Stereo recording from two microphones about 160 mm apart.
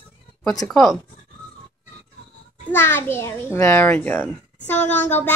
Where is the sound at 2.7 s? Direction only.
15° left (ahead or behind).